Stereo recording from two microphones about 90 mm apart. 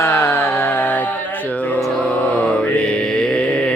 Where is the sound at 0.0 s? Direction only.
30° left (ahead or behind).